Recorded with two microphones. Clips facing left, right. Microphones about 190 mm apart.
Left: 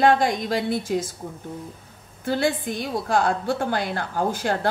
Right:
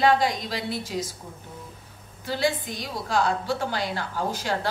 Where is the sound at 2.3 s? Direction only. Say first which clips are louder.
Left 3 dB; 55° left (ahead or behind).